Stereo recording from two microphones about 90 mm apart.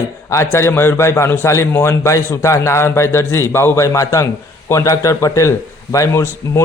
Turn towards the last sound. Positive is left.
turn(degrees=35)  # may be behind; listen again after turning